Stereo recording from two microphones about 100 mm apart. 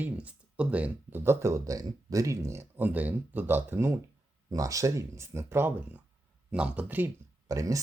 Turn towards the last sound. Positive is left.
turn(degrees=-35)  # may be behind; listen again after turning